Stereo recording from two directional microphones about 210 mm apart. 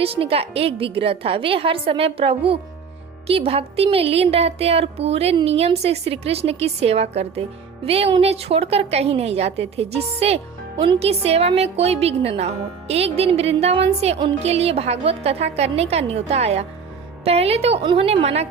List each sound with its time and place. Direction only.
0.0 s a woman's voice: 25° right (ahead or behind)